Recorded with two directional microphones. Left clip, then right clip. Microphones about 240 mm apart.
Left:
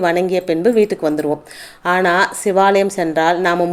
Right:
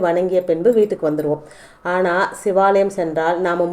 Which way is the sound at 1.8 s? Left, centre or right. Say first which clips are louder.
Left 3 dB; left.